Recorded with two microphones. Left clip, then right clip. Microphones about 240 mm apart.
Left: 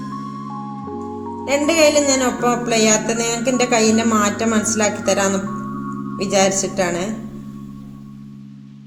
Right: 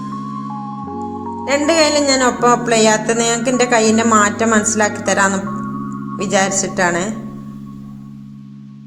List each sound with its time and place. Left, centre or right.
1.5 s speech: centre